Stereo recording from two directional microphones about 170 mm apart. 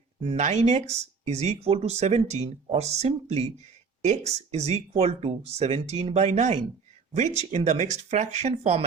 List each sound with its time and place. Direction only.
0.2 s speech: 40° right (ahead or behind)